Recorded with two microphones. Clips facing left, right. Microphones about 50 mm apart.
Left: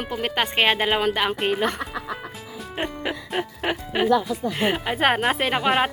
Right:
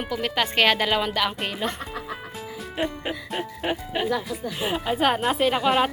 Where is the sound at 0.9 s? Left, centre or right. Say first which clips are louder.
Left 2 dB; left.